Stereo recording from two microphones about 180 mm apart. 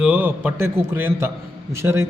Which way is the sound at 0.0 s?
10° right (ahead or behind).